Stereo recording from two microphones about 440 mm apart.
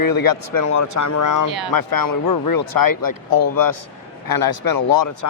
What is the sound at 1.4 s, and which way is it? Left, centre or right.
Speech, right.